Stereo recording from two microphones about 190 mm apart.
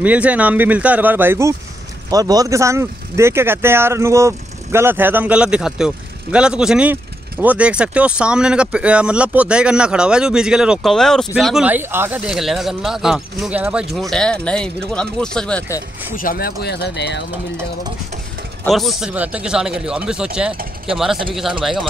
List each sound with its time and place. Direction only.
0.0 s speech: 5° right (ahead or behind)
16.2 s speech: 50° left (ahead or behind)
18.6 s speech: centre (ahead or behind)